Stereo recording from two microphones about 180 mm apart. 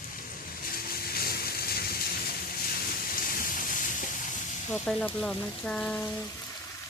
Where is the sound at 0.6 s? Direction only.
55° left (ahead or behind).